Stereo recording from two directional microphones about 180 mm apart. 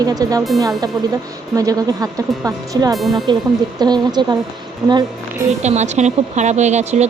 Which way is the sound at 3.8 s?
25° right (ahead or behind).